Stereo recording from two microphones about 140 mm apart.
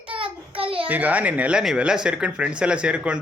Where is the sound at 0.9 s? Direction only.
10° right (ahead or behind).